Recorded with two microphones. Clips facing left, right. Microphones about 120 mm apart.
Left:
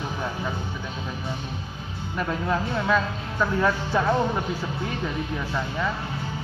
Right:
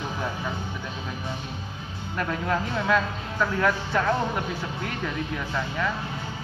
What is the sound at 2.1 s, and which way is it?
A man's voice, 10° left (ahead or behind).